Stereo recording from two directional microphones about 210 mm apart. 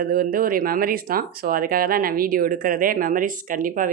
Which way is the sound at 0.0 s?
45° right (ahead or behind).